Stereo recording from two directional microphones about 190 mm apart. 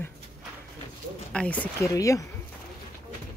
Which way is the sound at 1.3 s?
5° left (ahead or behind).